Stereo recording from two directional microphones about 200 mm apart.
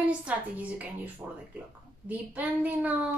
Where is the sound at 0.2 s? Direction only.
5° right (ahead or behind).